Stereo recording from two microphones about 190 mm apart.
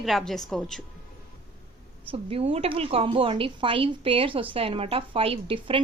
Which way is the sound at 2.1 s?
30° right (ahead or behind).